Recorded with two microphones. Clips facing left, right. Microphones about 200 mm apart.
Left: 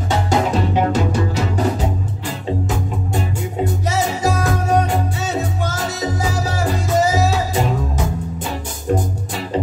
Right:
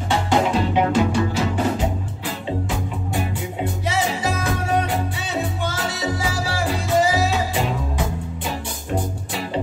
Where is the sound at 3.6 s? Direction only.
45° left (ahead or behind).